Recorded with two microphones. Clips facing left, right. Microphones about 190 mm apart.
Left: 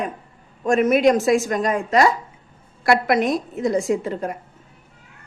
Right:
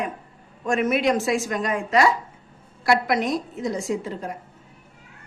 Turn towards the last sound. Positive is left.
turn(degrees=55)  # may be behind; listen again after turning